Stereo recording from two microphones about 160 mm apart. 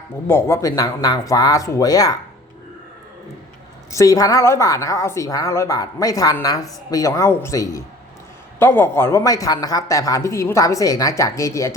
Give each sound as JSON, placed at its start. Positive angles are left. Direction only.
{"t": 0.3, "sound": "a woman's voice", "side_deg": 15}
{"t": 3.9, "sound": "a woman's voice", "side_deg": 20}